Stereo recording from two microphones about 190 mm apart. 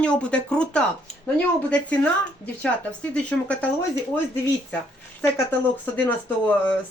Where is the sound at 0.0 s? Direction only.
5° left (ahead or behind).